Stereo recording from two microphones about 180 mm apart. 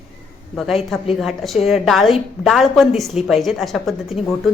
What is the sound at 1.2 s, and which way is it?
A woman's voice, centre (ahead or behind).